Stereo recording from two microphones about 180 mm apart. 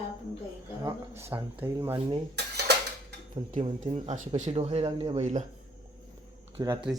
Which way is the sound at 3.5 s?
35° right (ahead or behind).